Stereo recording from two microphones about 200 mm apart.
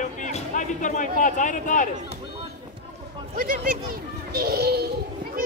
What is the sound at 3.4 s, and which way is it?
Speech, 45° right (ahead or behind).